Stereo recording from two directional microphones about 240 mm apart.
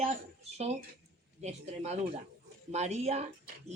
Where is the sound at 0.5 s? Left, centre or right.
Right.